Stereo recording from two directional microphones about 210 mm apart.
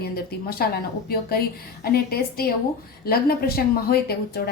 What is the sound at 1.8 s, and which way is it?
A woman's voice, 45° left (ahead or behind).